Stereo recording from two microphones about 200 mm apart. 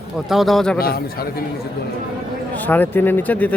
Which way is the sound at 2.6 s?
10° left (ahead or behind).